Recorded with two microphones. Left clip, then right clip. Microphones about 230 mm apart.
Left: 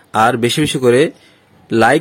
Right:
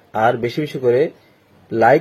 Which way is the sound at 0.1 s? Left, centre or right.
Left.